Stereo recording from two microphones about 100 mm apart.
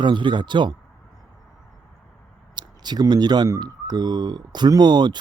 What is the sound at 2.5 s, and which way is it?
Speech, 45° right (ahead or behind).